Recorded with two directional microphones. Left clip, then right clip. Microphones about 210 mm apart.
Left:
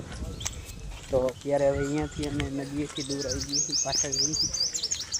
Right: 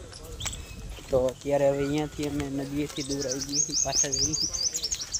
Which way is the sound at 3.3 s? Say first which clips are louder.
Left 1 dB; 20° left (ahead or behind).